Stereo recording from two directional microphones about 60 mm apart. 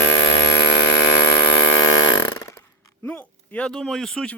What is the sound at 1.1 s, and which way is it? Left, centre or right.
Hum, left.